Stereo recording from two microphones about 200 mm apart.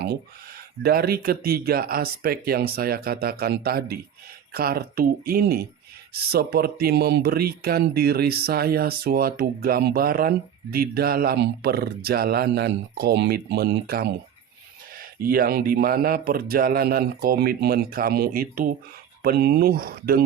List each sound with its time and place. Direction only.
0.8 s speech: 50° right (ahead or behind)